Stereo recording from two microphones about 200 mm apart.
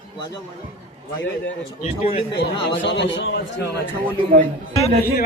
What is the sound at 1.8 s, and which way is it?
Speech, 30° left (ahead or behind).